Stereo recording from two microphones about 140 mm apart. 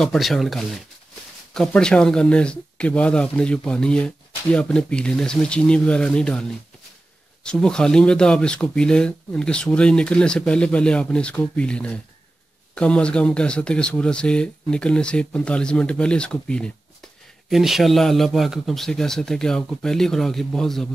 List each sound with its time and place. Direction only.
0.0 s a man's voice: centre (ahead or behind)
7.4 s a man's voice: 5° left (ahead or behind)